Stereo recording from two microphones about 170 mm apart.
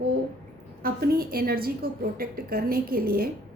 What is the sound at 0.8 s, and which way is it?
A woman's voice, 60° right (ahead or behind).